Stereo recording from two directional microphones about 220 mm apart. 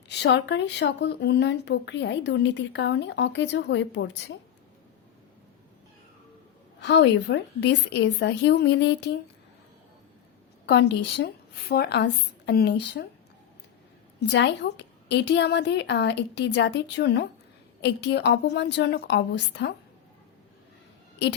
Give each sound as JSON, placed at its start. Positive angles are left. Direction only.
{"t": 0.1, "sound": "speech", "side_deg": 50}
{"t": 6.7, "sound": "speech", "side_deg": 50}
{"t": 10.7, "sound": "speech", "side_deg": 50}
{"t": 14.2, "sound": "speech", "side_deg": 50}